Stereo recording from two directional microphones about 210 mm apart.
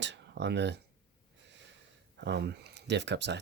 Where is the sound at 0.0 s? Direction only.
55° right (ahead or behind).